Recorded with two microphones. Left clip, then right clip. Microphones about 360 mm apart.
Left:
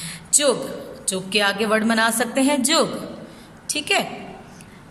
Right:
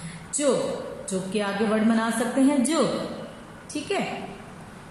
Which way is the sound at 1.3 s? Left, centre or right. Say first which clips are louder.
Left 7 dB; left.